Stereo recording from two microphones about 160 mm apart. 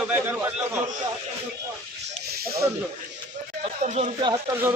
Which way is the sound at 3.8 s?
50° right (ahead or behind).